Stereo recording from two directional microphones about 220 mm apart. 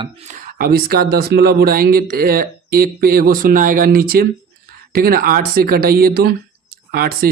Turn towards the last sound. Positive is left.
turn(degrees=-45)  # may be behind; listen again after turning